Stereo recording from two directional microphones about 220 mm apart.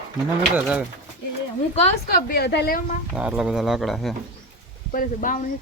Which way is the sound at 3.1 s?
5° right (ahead or behind).